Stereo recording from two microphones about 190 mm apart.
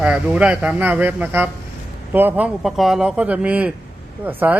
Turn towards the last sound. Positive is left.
turn(degrees=-10)  # may be behind; listen again after turning